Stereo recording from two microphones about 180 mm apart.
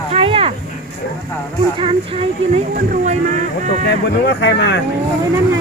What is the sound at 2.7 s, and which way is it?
Speech, 45° right (ahead or behind).